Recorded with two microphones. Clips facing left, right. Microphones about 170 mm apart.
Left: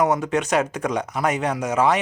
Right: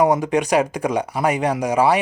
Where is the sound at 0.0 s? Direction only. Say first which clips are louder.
Right 3 dB; 10° right (ahead or behind).